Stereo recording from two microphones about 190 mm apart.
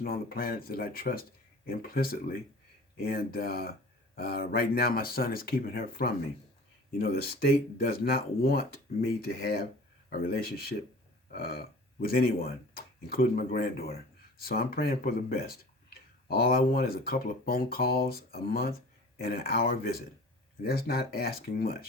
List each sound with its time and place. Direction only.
0.0 s speech: 50° left (ahead or behind)